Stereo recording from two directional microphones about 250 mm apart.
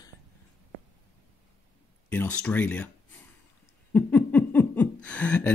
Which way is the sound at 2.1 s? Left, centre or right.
Centre.